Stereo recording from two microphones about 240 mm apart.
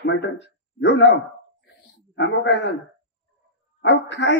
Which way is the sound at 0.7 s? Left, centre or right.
Left.